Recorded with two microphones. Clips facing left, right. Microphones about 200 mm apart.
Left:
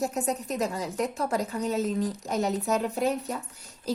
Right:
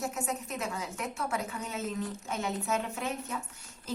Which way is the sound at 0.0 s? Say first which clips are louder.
Left 6 dB; 35° left (ahead or behind).